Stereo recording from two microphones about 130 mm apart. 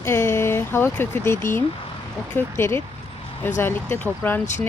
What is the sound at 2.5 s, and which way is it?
Speech, 20° left (ahead or behind).